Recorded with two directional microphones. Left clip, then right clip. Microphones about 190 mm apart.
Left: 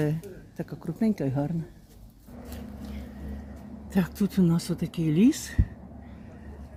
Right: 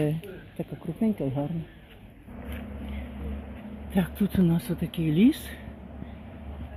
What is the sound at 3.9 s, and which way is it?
Speech, 40° left (ahead or behind).